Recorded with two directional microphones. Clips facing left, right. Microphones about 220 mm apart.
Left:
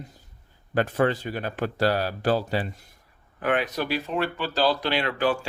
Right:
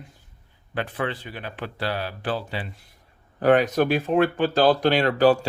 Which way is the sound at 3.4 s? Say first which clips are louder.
Right 7 dB; 40° right (ahead or behind).